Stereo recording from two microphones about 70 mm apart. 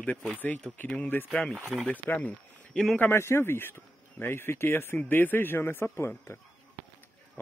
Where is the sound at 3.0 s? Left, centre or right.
Left.